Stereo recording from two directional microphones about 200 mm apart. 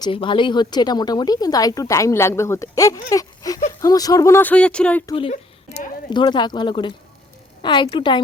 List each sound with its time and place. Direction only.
0.0 s speech: 25° left (ahead or behind); by 5.0 s 5° left (ahead or behind)
5.0 s a woman's voice: 25° left (ahead or behind)